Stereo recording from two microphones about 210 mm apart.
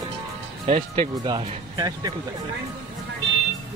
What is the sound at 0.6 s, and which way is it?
Speech, 30° right (ahead or behind).